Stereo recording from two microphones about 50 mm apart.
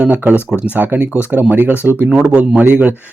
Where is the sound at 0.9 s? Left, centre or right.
Right.